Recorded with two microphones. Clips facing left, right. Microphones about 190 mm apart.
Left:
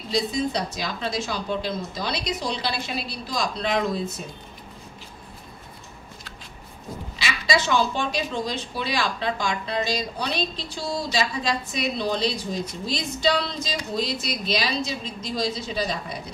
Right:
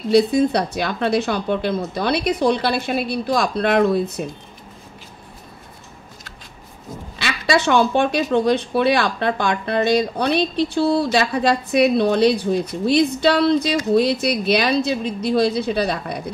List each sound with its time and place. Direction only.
0.1 s speech: 60° right (ahead or behind)
7.2 s speech: 60° right (ahead or behind)